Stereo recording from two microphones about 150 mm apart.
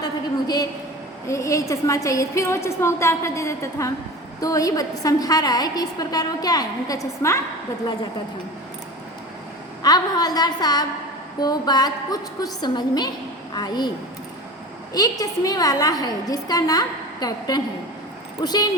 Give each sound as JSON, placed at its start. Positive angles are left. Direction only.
{"t": 0.0, "sound": "a sound", "side_deg": 25}
{"t": 1.3, "sound": "a woman's voice", "side_deg": 20}
{"t": 9.8, "sound": "a woman's voice", "side_deg": 25}
{"t": 14.9, "sound": "a woman's voice", "side_deg": 25}